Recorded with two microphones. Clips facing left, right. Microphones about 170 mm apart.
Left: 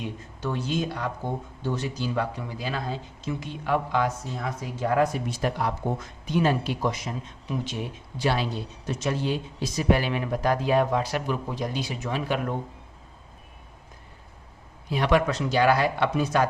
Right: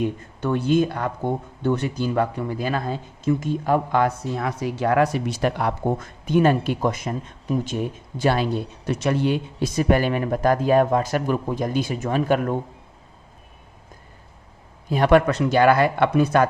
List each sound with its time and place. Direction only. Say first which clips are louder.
0.0 s speech: right 7 dB; 55° right (ahead or behind)
4.0 s speech: right 6 dB; 70° right (ahead or behind); by 12.5 s 50° right (ahead or behind)
14.8 s speech: right 6 dB; 50° right (ahead or behind)